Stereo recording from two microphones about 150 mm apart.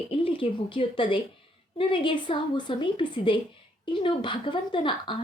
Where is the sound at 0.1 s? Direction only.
35° left (ahead or behind).